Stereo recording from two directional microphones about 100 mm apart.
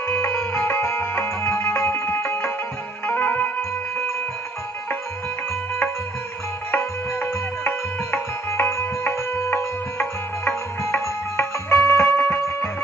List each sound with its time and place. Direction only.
0.1 s music: 25° left (ahead or behind)
6.7 s music: 20° left (ahead or behind)